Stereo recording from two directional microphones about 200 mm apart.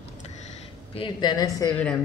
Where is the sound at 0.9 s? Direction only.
25° left (ahead or behind).